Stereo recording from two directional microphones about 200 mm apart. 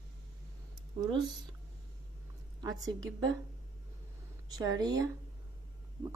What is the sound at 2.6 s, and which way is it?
Speech, 20° right (ahead or behind).